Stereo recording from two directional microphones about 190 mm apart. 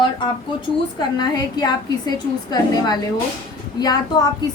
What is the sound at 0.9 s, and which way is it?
A woman's voice, 20° left (ahead or behind).